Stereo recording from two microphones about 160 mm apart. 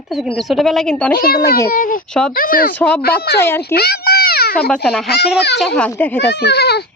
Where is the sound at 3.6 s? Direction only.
80° left.